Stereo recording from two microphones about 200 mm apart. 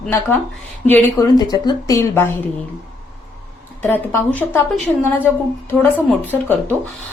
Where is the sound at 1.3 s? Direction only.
20° left (ahead or behind).